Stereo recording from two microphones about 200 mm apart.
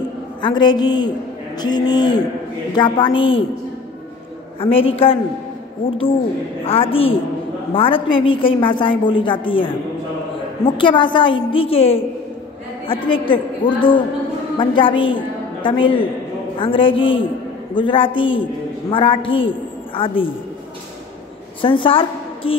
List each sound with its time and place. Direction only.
0.4 s a woman's voice: 25° left (ahead or behind)
4.6 s a woman's voice: 25° left (ahead or behind)
10.8 s a woman's voice: 25° left (ahead or behind)
21.5 s a woman's voice: 25° left (ahead or behind)